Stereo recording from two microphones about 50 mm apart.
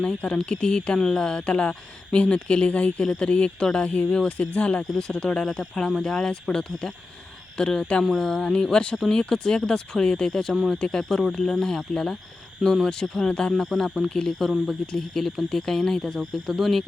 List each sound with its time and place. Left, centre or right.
0.0 s speech: centre
4.8 s speech: centre
8.1 s speech: centre
13.6 s speech: centre